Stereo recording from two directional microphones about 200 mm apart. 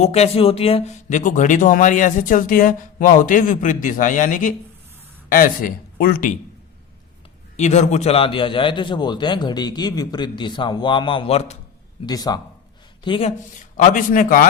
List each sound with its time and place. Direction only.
0.0 s speech: 30° left (ahead or behind)
7.5 s a man's voice: 35° left (ahead or behind)
12.0 s a man's voice: 20° left (ahead or behind)
13.7 s speech: 40° left (ahead or behind)